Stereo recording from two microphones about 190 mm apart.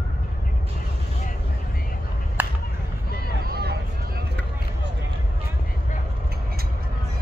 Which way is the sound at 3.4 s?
55° right (ahead or behind).